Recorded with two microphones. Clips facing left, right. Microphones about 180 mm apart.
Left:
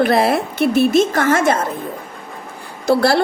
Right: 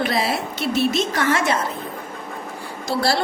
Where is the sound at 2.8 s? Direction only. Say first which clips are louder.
Left 7 dB; 60° left (ahead or behind).